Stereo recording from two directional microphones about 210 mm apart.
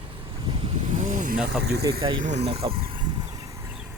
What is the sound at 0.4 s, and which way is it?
Vehicle, 25° right (ahead or behind).